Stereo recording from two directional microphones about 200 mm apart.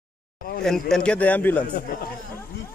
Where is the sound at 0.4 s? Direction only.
50° left (ahead or behind).